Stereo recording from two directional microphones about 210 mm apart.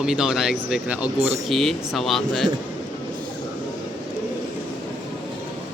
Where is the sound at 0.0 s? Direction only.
5° right (ahead or behind).